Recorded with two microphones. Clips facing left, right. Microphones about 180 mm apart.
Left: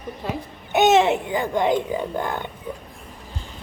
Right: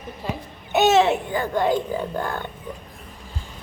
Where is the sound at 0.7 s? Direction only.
15° left (ahead or behind).